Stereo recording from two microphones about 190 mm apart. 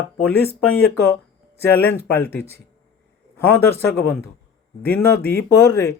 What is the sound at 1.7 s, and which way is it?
Speech, 10° left (ahead or behind).